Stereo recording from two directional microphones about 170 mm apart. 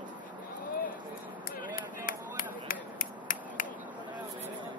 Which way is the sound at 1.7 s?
55° left (ahead or behind).